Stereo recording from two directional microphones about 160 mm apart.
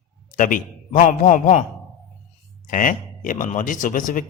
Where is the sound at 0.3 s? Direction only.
55° left (ahead or behind).